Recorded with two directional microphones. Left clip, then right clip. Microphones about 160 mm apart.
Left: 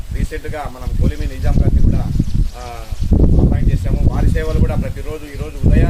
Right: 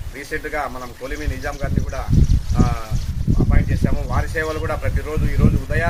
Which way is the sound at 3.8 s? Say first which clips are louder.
Left 1 dB; 20° left (ahead or behind).